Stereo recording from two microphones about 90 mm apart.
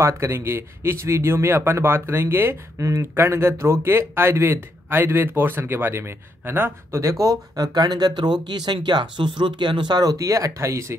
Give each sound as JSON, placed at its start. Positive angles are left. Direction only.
{"t": 0.0, "sound": "speech", "side_deg": -30}